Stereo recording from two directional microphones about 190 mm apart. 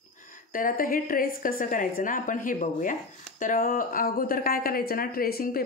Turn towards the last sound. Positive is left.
turn(degrees=50)  # may be behind; listen again after turning